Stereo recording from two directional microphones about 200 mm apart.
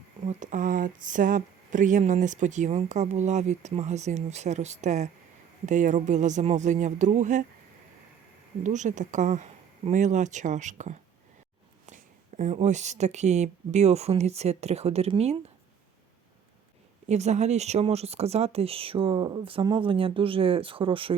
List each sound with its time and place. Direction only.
0.3 s speech: 40° right (ahead or behind)
8.6 s speech: 35° right (ahead or behind)
12.4 s speech: 35° right (ahead or behind)
17.1 s speech: 35° right (ahead or behind)